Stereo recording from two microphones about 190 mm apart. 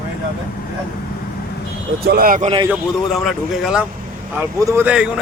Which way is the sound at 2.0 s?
55° right (ahead or behind).